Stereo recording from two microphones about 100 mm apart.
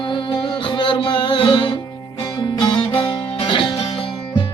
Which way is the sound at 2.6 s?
50° left (ahead or behind).